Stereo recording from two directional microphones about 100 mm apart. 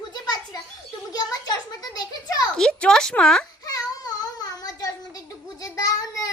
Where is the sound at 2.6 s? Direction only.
10° left (ahead or behind).